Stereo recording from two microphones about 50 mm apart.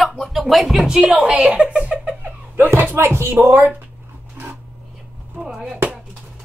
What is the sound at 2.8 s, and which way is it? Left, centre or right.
Speech, right.